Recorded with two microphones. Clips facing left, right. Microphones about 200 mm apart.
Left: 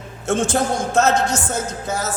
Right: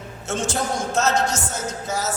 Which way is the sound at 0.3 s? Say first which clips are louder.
Left 6 dB; 55° left (ahead or behind).